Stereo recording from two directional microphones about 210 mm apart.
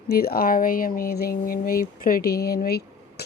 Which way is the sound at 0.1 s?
45° left (ahead or behind).